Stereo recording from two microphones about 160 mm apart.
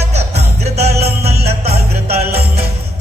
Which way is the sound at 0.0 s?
40° right (ahead or behind).